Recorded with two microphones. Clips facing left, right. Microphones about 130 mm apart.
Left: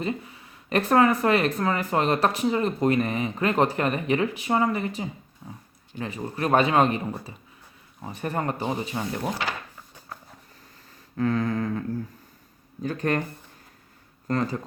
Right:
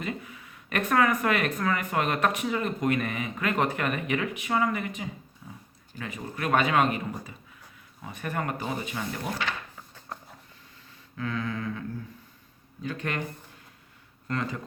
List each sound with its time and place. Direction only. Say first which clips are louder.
0.0 s speech: left 5 dB; 30° left (ahead or behind)
5.4 s dog: left 4 dB; 30° left (ahead or behind)
6.0 s speech: left 5 dB; 30° left (ahead or behind)
9.5 s a sound: left 2 dB; 10° left (ahead or behind)
11.2 s speech: left 7 dB; 40° left (ahead or behind)
12.8 s speech: left 6 dB; 40° left (ahead or behind)
14.3 s speech: left 5 dB; 35° left (ahead or behind)